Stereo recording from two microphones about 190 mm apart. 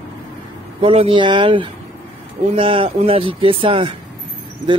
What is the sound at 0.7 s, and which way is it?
Speech, 30° right (ahead or behind).